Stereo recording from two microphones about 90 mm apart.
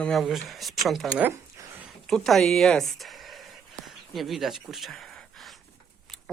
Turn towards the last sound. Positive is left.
turn(degrees=0)  # may be behind; listen again after turning